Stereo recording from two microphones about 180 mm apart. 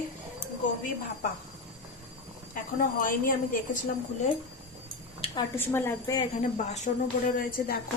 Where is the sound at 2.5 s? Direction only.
50° left (ahead or behind).